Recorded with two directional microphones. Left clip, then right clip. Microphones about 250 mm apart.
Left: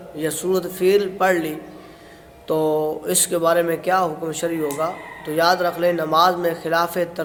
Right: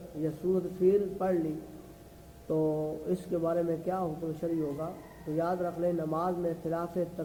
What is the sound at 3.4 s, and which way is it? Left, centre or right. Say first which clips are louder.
A man's voice: left 13 dB; centre.